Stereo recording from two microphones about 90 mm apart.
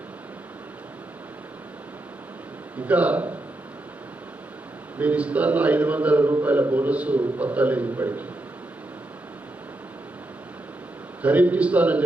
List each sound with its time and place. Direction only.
2.7 s a man's voice: 15° right (ahead or behind)
4.9 s a man's voice: 15° right (ahead or behind)
11.2 s a man's voice: 15° right (ahead or behind)